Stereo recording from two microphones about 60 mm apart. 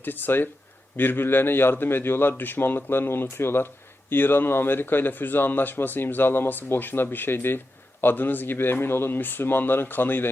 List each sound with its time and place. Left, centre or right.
0.0 s speech: left